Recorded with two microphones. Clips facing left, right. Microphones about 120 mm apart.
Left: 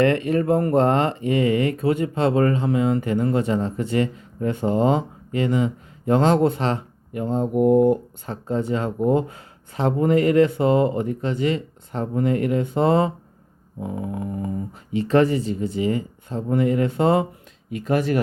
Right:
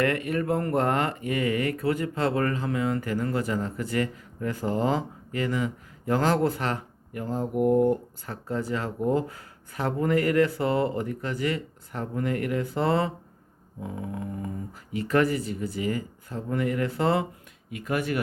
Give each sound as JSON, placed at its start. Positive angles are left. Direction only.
{"t": 0.0, "sound": "speech", "side_deg": 25}